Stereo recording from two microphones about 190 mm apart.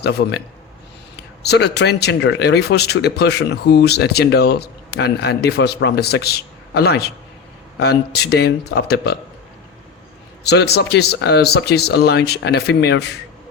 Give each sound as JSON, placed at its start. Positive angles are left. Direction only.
{"t": 0.0, "sound": "speech", "side_deg": 60}
{"t": 10.4, "sound": "speech", "side_deg": 60}